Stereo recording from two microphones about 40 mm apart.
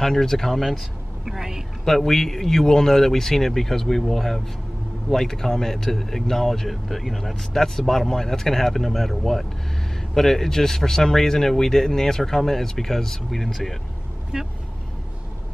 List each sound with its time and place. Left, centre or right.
0.0 s speech: centre
1.2 s a woman's voice: centre
1.9 s speech: centre
14.3 s speech: centre